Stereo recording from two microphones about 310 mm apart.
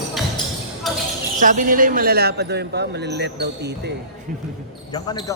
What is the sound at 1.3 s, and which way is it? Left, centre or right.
Speech, right.